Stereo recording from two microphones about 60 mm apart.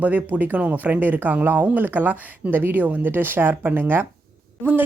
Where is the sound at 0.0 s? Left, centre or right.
Right.